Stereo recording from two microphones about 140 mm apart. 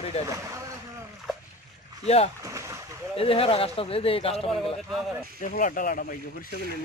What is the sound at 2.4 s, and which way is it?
Boat, 20° right (ahead or behind).